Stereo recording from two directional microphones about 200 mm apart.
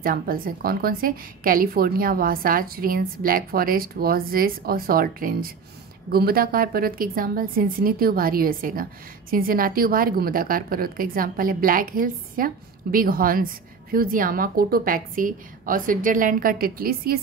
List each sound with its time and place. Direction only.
0.0 s a woman's voice: 45° right (ahead or behind)